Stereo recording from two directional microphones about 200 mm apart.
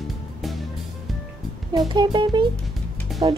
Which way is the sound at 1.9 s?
20° right (ahead or behind).